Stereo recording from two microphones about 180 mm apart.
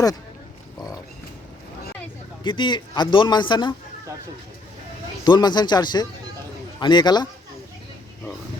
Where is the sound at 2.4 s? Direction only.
25° left (ahead or behind).